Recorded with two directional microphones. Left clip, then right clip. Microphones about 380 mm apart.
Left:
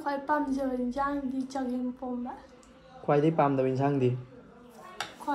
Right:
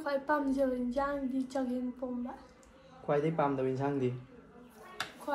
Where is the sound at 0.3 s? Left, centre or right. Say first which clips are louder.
Left 1 dB; centre.